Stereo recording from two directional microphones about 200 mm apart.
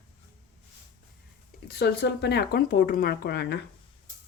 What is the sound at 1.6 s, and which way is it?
Speech, 55° left (ahead or behind).